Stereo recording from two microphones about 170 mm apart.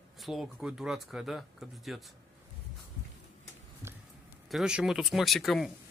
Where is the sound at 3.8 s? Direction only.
15° right (ahead or behind).